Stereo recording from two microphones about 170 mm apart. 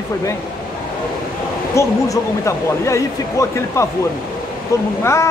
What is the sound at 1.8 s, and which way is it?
A man's voice, 15° left (ahead or behind).